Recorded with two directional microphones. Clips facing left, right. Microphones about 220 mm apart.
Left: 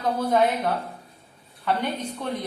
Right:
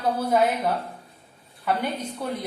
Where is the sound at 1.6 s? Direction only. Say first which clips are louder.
Even; 5° right (ahead or behind).